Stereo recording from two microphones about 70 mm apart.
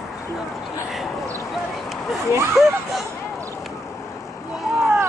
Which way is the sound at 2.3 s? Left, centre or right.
Right.